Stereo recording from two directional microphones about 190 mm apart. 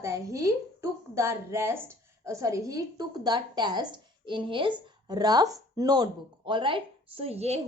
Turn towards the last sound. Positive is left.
turn(degrees=-35)  # may be behind; listen again after turning